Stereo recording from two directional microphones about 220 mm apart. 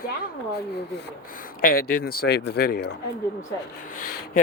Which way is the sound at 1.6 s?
45° left (ahead or behind).